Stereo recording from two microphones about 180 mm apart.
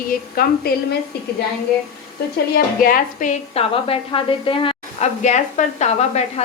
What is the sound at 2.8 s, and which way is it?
A woman's voice, 50° left (ahead or behind).